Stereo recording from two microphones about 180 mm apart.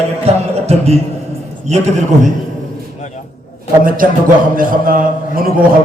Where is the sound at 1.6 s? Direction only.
40° right (ahead or behind).